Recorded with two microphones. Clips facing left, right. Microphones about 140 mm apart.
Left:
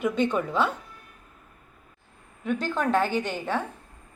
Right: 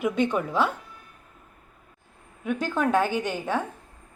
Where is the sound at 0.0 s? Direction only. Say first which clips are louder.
Even; 10° right (ahead or behind).